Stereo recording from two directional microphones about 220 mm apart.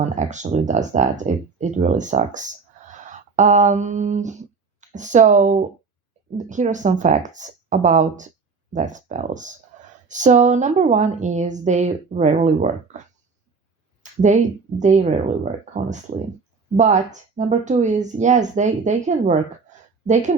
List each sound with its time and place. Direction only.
0.0 s a woman's voice: 35° right (ahead or behind)
14.0 s a woman's voice: 35° right (ahead or behind)